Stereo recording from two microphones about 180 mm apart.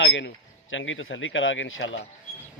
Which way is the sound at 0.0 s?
80° left.